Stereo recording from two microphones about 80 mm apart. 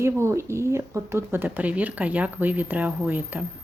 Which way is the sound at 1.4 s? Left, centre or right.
Centre.